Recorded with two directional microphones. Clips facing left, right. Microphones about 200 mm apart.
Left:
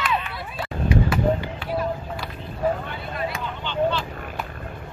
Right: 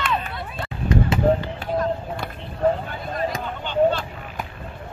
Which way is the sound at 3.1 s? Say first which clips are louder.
Right 4 dB; 40° right (ahead or behind).